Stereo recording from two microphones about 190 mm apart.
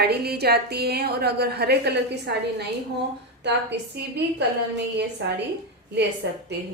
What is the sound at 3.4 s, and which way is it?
A woman's voice, 65° right (ahead or behind).